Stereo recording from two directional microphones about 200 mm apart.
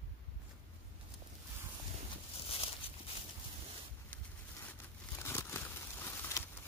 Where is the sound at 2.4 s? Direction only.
30° left (ahead or behind).